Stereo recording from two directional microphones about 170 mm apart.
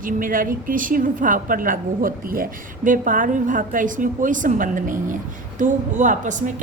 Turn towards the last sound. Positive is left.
turn(degrees=-45)  # may be behind; listen again after turning